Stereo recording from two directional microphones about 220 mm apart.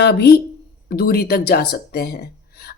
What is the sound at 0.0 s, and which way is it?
Speech, 50° left (ahead or behind).